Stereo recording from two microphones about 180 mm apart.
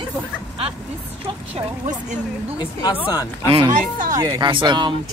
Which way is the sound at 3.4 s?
30° right (ahead or behind).